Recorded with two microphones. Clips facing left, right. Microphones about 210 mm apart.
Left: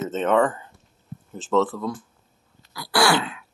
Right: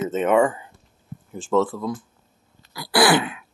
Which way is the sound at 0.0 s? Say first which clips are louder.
Right 2 dB; 10° right (ahead or behind).